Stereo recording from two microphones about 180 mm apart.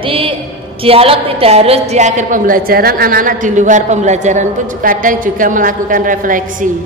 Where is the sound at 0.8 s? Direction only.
30° right (ahead or behind); by 6.7 s 45° right (ahead or behind).